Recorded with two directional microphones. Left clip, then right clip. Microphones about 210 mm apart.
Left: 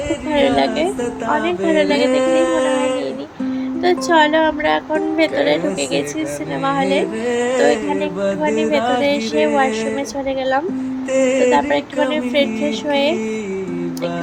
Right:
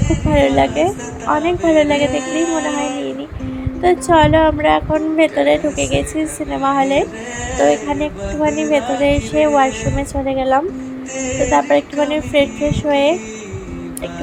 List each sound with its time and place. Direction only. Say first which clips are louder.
0.3 s speech: right 2 dB; 5° right (ahead or behind)
2.2 s speech: left 4 dB; 25° left (ahead or behind)
3.8 s speech: right 2 dB; 5° right (ahead or behind)